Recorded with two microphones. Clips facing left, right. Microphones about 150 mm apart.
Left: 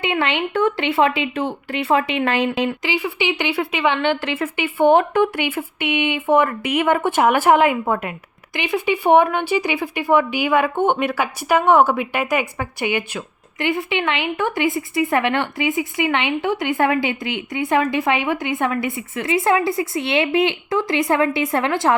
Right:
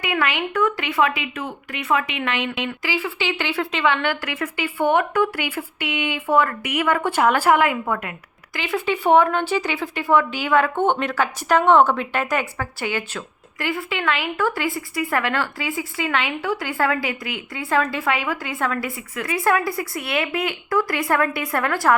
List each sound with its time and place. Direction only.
0.0 s speech: 25° left (ahead or behind)
2.8 s speech: 15° left (ahead or behind)